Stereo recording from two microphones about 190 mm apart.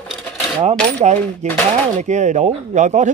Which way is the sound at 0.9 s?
40° right (ahead or behind).